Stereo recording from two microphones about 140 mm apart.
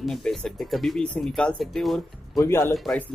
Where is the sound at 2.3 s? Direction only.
20° left (ahead or behind).